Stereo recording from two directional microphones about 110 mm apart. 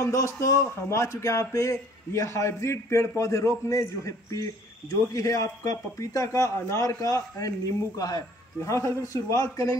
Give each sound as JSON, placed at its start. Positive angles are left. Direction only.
{"t": 0.0, "sound": "speech", "side_deg": 30}